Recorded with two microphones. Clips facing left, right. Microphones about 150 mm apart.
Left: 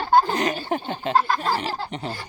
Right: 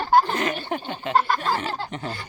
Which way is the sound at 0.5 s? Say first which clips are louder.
Left 2 dB; 40° left (ahead or behind).